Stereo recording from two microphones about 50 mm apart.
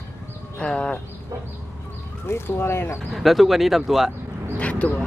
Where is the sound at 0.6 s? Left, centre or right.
Centre.